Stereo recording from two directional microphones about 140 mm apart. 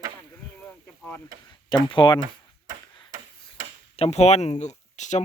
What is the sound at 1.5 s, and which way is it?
Speech, 35° left (ahead or behind).